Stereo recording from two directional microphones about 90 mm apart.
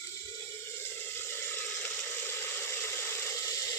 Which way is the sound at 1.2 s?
25° left (ahead or behind).